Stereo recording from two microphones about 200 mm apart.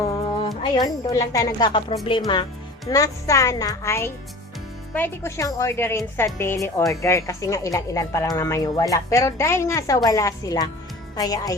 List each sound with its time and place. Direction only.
0.6 s speech: 20° left (ahead or behind)